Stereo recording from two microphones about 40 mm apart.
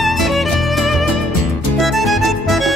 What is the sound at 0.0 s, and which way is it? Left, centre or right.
Music, centre.